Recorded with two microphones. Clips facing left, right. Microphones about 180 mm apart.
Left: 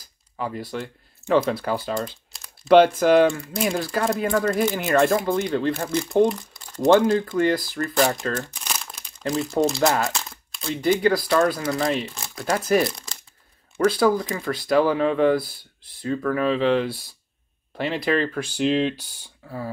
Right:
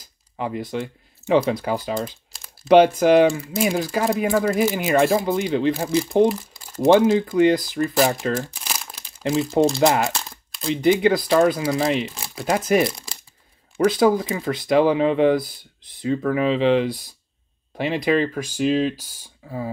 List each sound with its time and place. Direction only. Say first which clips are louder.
0.4 s speech: right 3 dB; 20° right (ahead or behind); by 3.7 s 5° right (ahead or behind)
3.7 s speech: right 2 dB; 15° right (ahead or behind)
8.5 s crumpling: even; 5° right (ahead or behind)
9.8 s speech: right 3 dB; 20° right (ahead or behind)
10.0 s crumpling: right 2 dB; centre (ahead or behind)
10.7 s speech: right 3 dB; 15° right (ahead or behind)
13.8 s speech: right 2 dB; 20° right (ahead or behind)